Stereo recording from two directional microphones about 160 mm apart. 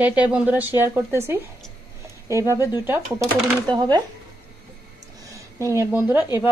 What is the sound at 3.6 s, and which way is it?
Speech, 25° right (ahead or behind).